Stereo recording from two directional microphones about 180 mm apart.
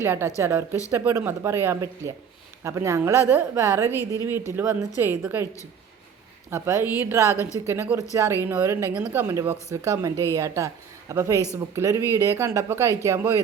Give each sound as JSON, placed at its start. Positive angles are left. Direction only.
{"t": 0.0, "sound": "speech", "side_deg": -15}
{"t": 6.5, "sound": "speech", "side_deg": -15}